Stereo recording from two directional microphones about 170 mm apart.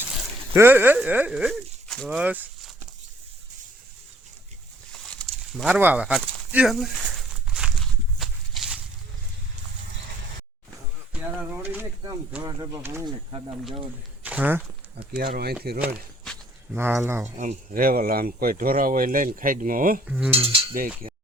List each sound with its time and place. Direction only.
0.5 s speech: 15° right (ahead or behind); by 2.1 s centre (ahead or behind)
2.1 s speech: 10° right (ahead or behind)
4.9 s a sound: 5° left (ahead or behind)
11.1 s speech: 5° right (ahead or behind)
14.3 s speech: 10° right (ahead or behind)
15.1 s speech: 65° right (ahead or behind)
16.7 s speech: 15° right (ahead or behind)
17.2 s speech: 45° right (ahead or behind)
20.1 s cutlery: 5° right (ahead or behind)
20.3 s cutlery: 30° right (ahead or behind)
21.0 s a sound: 30° right (ahead or behind)